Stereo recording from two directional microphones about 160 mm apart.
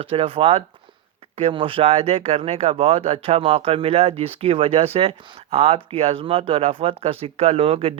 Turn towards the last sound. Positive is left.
turn(degrees=-35)  # may be behind; listen again after turning